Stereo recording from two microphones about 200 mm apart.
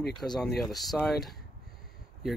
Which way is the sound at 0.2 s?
5° left (ahead or behind).